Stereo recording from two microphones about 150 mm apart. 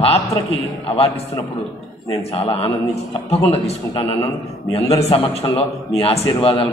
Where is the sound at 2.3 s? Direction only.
40° left (ahead or behind).